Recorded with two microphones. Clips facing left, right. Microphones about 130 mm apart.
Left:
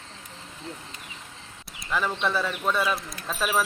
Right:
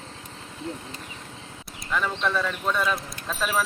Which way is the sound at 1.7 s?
5° left (ahead or behind).